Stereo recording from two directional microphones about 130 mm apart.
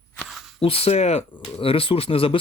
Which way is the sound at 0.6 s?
45° left (ahead or behind).